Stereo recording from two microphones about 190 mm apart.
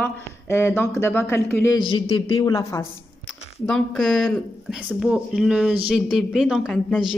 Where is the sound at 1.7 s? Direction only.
25° left (ahead or behind).